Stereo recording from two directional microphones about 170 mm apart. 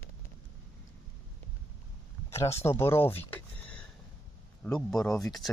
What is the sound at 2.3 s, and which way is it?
Speech, 15° left (ahead or behind).